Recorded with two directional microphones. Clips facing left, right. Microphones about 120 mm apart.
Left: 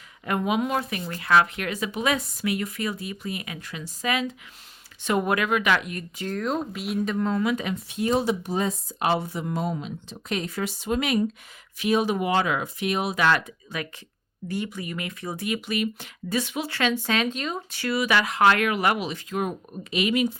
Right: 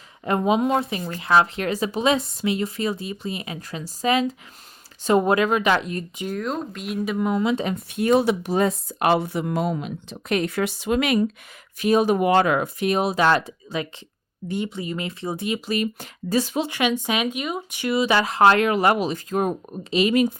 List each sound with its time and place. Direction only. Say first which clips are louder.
0.3 s speech: right 5 dB; 30° right (ahead or behind)
6.3 s speech: left 1 dB; centre (ahead or behind); by 7.7 s 25° right (ahead or behind)
7.7 s speech: right 5 dB; 55° right (ahead or behind); by 11.3 s 80° right
11.8 s speech: right 5 dB; 45° right (ahead or behind)
16.6 s speech: right 2 dB; 15° right (ahead or behind); by 20.2 s 35° right (ahead or behind)